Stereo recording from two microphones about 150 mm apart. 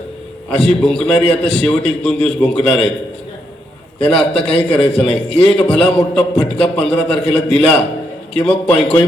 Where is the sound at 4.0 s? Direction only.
10° left (ahead or behind).